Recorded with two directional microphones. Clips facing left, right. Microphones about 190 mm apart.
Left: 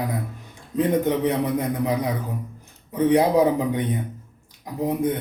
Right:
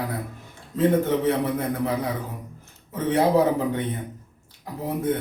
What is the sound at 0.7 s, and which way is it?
A man's voice, 15° left (ahead or behind).